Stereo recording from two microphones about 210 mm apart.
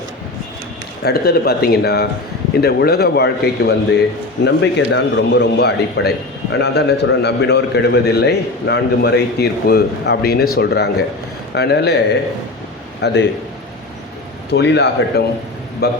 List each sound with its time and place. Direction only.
1.0 s a man's voice: 50° left (ahead or behind)
13.0 s a man's voice: 55° left (ahead or behind)
14.5 s a man's voice: 55° left (ahead or behind)